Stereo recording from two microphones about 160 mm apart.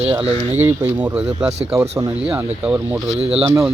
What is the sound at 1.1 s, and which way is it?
A man's voice, 5° right (ahead or behind).